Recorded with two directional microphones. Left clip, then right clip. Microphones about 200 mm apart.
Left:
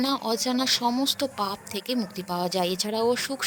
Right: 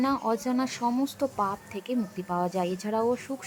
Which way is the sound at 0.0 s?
45° left (ahead or behind).